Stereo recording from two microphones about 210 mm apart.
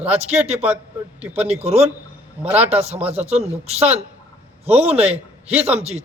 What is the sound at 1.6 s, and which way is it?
A man's voice, 30° right (ahead or behind).